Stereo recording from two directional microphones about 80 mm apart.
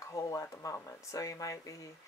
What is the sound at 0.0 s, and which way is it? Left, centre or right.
A woman's voice, left.